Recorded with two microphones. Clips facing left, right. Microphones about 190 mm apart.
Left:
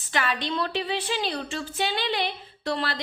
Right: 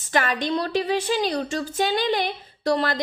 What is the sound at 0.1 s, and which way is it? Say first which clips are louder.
A woman's voice: right 5 dB; 45° right (ahead or behind).